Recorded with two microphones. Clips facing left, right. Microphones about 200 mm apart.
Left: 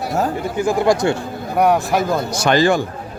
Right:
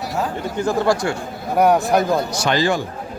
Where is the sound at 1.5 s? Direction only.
Centre (ahead or behind).